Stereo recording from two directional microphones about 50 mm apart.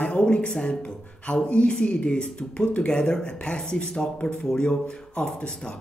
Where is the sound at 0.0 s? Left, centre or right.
Left.